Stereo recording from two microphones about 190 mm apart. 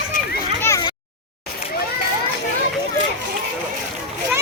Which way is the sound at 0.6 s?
15° left (ahead or behind).